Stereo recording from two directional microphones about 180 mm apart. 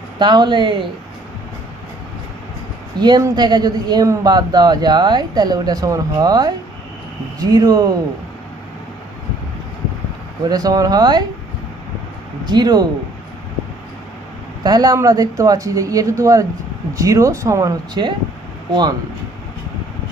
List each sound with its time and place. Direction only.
0.2 s a woman's voice: 25° right (ahead or behind)
3.0 s a woman's voice: 20° right (ahead or behind)
10.5 s a woman's voice: 20° right (ahead or behind)
12.5 s a woman's voice: 25° right (ahead or behind)
14.6 s a woman's voice: 20° right (ahead or behind)